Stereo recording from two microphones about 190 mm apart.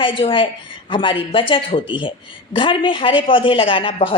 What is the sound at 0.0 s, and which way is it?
A woman's voice, 25° left (ahead or behind).